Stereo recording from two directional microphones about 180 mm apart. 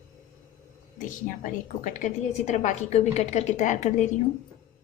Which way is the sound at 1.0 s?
45° left (ahead or behind).